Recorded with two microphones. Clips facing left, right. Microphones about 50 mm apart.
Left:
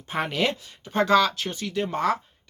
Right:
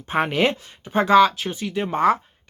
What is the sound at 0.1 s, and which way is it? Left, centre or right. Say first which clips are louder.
Speech: right 5 dB; right.